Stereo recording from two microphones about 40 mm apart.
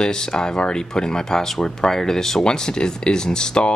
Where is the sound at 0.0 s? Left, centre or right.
Centre.